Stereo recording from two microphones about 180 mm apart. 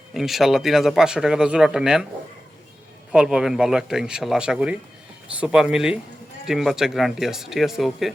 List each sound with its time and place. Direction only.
0.1 s speech: centre (ahead or behind)
3.1 s speech: 5° right (ahead or behind)